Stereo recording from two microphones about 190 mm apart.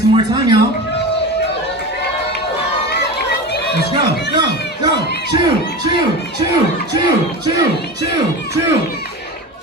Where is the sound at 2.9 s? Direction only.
60° left (ahead or behind).